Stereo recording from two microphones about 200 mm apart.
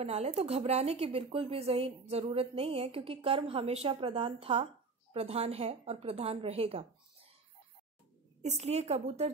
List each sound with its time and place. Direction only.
0.0 s a woman's voice: 30° right (ahead or behind)
8.4 s a woman's voice: 35° right (ahead or behind)